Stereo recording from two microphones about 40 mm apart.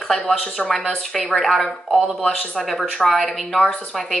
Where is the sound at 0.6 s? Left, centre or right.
Centre.